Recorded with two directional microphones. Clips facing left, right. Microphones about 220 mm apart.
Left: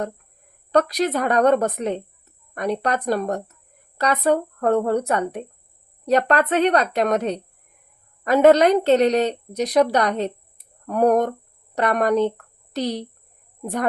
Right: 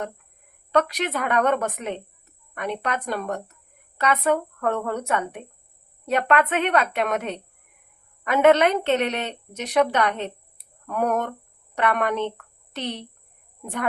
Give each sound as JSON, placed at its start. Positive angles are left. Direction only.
{"t": 0.7, "sound": "a woman's voice", "side_deg": 35}